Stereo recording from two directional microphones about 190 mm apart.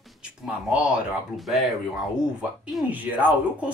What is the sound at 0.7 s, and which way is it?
Speech, 5° right (ahead or behind).